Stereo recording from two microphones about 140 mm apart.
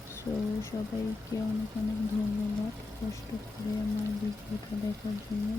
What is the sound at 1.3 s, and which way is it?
Speech, 25° left (ahead or behind).